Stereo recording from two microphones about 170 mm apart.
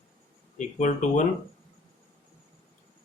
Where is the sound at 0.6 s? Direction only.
45° left (ahead or behind).